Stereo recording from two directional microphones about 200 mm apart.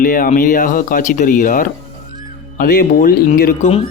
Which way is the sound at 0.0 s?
40° left (ahead or behind).